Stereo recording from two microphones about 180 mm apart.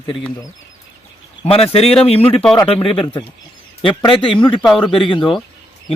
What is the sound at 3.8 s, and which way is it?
Speech, 25° left (ahead or behind).